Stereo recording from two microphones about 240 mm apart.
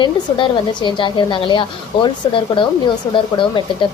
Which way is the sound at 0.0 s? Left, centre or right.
Centre.